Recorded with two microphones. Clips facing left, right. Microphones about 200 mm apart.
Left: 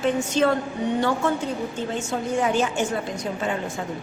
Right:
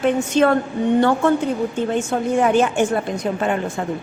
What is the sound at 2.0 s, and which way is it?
A woman's voice, 55° right (ahead or behind).